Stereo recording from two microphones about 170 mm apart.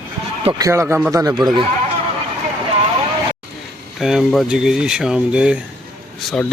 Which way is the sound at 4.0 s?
Centre (ahead or behind).